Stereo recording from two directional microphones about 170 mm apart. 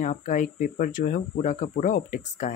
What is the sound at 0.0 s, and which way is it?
Speech, 50° left (ahead or behind).